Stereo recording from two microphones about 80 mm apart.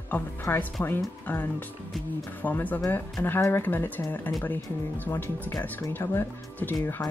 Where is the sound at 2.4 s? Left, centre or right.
Left.